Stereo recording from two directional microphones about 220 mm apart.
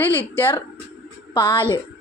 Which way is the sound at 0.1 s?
10° left (ahead or behind).